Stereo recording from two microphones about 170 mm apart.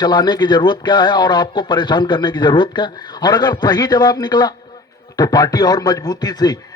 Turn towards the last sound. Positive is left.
turn(degrees=25)  # may be behind; listen again after turning